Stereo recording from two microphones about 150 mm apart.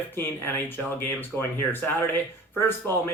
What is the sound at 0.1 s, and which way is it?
Speech, 15° left (ahead or behind).